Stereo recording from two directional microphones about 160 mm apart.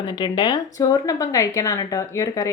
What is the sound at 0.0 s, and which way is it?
Speech, 25° left (ahead or behind).